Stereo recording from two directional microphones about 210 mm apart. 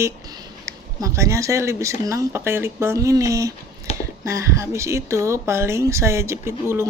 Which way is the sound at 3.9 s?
30° left (ahead or behind).